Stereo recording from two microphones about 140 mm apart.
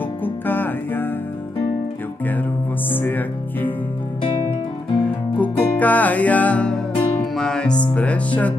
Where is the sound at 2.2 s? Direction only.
15° left (ahead or behind).